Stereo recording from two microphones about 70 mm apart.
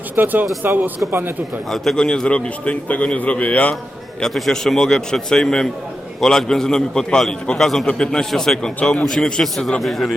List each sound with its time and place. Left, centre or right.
0.2 s speech: right
1.7 s a man's voice: centre; by 3.8 s left
4.2 s a man's voice: centre